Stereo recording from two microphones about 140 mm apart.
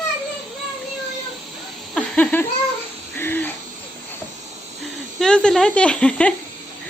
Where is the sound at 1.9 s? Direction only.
10° left (ahead or behind).